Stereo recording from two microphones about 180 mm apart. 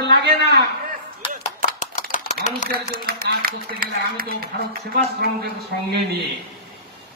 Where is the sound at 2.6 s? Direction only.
55° right (ahead or behind).